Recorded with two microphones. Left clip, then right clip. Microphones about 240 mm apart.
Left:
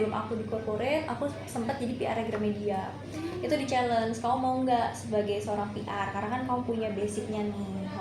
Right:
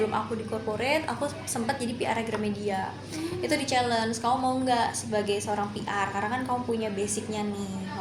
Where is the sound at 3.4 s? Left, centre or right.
Right.